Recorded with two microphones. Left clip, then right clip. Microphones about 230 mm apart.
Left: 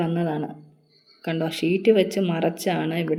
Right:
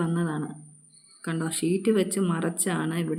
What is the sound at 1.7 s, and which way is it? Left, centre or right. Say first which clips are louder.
Speech: left 8 dB; right.